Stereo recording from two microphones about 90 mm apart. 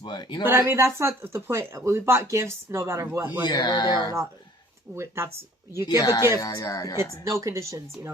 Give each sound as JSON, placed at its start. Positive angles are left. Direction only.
{"t": 0.0, "sound": "speech", "side_deg": 55}
{"t": 0.4, "sound": "speech", "side_deg": -25}
{"t": 3.4, "sound": "speech", "side_deg": 50}
{"t": 4.9, "sound": "speech", "side_deg": -30}
{"t": 6.0, "sound": "speech", "side_deg": 45}
{"t": 7.3, "sound": "speech", "side_deg": -35}